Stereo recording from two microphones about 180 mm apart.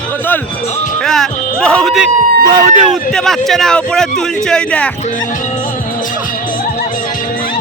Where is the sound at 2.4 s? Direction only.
25° right (ahead or behind).